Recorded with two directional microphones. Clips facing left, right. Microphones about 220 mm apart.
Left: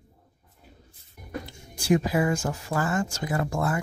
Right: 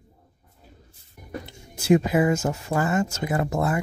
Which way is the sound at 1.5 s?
20° right (ahead or behind).